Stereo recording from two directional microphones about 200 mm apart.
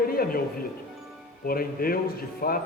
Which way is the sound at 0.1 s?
50° left (ahead or behind).